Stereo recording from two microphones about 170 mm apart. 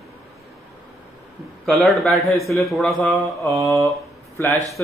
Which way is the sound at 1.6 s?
Centre (ahead or behind).